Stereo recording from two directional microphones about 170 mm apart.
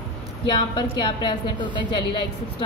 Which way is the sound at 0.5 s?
25° left (ahead or behind).